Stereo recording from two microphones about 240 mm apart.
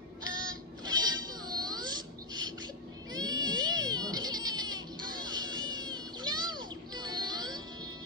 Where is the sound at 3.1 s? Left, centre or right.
Centre.